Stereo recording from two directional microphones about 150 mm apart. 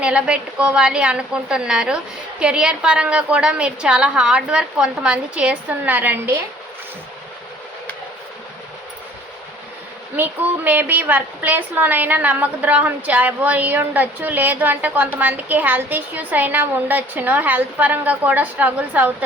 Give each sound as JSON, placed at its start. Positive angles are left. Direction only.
{"t": 0.0, "sound": "a woman's voice", "side_deg": -5}
{"t": 10.2, "sound": "a woman's voice", "side_deg": -10}